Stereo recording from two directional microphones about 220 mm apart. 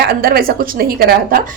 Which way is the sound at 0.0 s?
45° right (ahead or behind).